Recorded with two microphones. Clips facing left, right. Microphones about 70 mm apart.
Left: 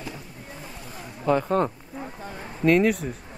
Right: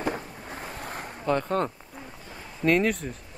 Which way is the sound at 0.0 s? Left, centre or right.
Right.